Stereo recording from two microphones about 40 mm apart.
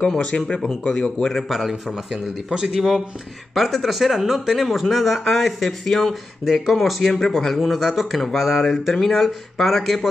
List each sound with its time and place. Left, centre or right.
0.0 s speech: left
0.6 s speech: centre
1.5 s speech: centre
7.2 s speech: centre
7.7 s speech: centre
9.0 s speech: centre